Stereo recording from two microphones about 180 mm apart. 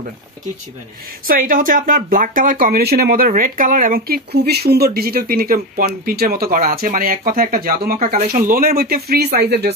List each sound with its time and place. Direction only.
1.2 s speech: 50° right (ahead or behind)